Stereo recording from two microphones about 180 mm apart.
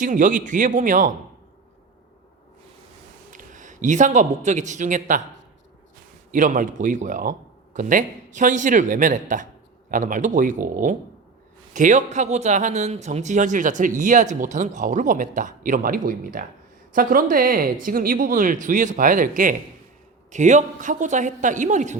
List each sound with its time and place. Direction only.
0.0 s speech: 45° right (ahead or behind)
3.3 s speech: 45° right (ahead or behind)
6.3 s speech: 45° right (ahead or behind)